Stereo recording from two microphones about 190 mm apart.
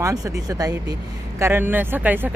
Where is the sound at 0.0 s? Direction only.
15° right (ahead or behind).